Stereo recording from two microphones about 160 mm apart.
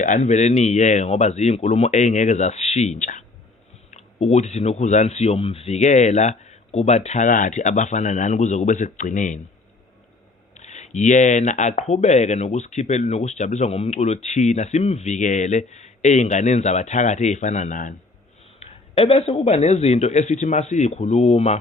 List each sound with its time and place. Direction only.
0.0 s speech: 50° left (ahead or behind)
10.5 s speech: 45° left (ahead or behind)
18.6 s speech: 40° left (ahead or behind)